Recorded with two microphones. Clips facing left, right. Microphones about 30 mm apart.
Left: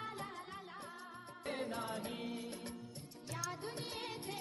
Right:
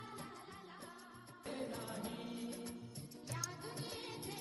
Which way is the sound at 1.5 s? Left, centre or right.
Left.